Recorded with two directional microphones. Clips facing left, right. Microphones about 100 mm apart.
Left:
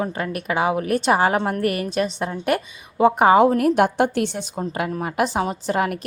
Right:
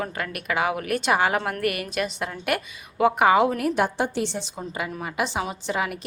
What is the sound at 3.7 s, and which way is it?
A woman's voice, 60° left (ahead or behind).